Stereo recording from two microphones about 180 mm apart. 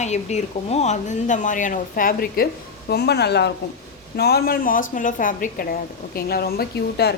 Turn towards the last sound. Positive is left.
turn(degrees=65)  # may be behind; listen again after turning